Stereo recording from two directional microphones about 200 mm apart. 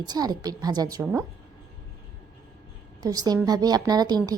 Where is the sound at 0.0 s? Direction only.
20° right (ahead or behind).